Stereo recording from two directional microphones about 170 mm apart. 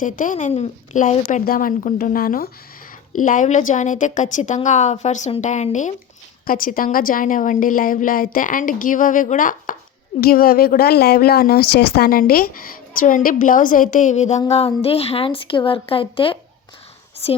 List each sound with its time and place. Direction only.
0.0 s a woman's voice: 50° left (ahead or behind)
6.4 s a woman's voice: 55° left (ahead or behind)
10.2 s speech: 60° left (ahead or behind); by 17.4 s 35° left (ahead or behind)